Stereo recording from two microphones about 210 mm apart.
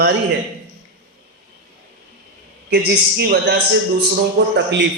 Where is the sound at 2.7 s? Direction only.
50° right (ahead or behind).